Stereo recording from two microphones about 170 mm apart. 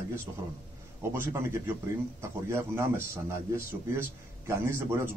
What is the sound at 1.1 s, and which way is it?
A man's voice, 15° right (ahead or behind).